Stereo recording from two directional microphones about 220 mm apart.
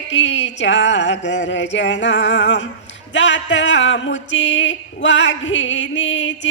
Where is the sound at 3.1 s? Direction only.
55° left (ahead or behind).